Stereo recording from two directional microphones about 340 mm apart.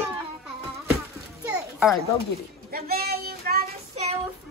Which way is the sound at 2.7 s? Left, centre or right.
Right.